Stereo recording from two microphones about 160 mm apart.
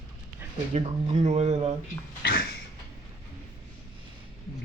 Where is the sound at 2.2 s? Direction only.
70° left (ahead or behind).